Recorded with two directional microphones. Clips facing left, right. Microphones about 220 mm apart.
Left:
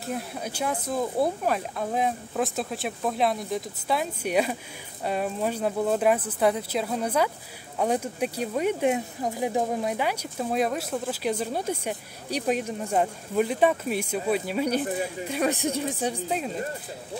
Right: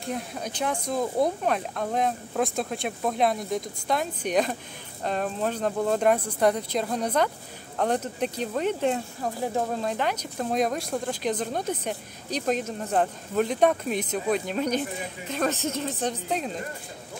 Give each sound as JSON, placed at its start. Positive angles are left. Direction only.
{"t": 0.0, "sound": "speech", "side_deg": 5}